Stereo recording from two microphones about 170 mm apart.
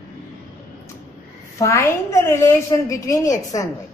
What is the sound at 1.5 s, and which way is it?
A woman's voice, 15° left (ahead or behind).